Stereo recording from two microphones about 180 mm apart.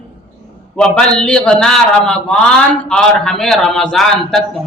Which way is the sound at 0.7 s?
5° left (ahead or behind).